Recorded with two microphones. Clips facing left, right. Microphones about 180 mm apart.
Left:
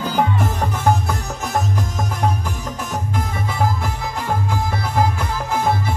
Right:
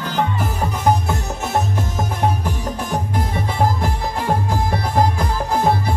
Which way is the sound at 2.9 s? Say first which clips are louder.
Right 2 dB; 30° right (ahead or behind).